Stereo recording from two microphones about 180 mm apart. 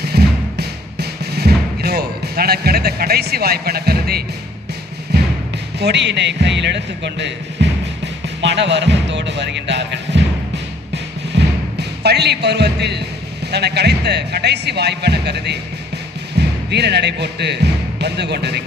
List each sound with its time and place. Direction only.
0.0 s music: 65° right (ahead or behind)
5.8 s speech: 70° right (ahead or behind)
10.9 s music: 70° right (ahead or behind)
13.5 s speech: 65° right (ahead or behind)